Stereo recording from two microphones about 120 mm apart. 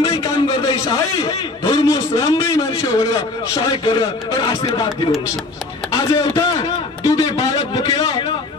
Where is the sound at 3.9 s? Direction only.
40° left (ahead or behind).